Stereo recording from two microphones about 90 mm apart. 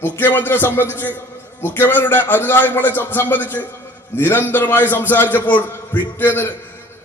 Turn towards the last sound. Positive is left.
turn(degrees=20)  # may be behind; listen again after turning